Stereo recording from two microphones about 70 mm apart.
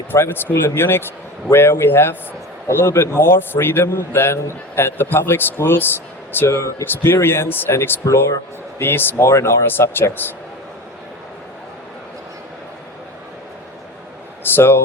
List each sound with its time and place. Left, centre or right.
0.1 s a man's voice: left
6.9 s a man's voice: left
8.0 s speech: left
8.8 s a man's voice: left
9.2 s speech: left
9.6 s a man's voice: left
14.5 s speech: left